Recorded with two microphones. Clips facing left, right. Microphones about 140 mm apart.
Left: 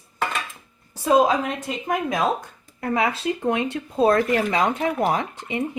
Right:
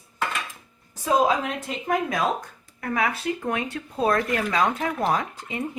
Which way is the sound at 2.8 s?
25° left (ahead or behind).